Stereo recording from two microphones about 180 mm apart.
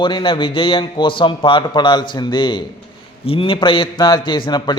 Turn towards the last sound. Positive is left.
turn(degrees=25)  # may be behind; listen again after turning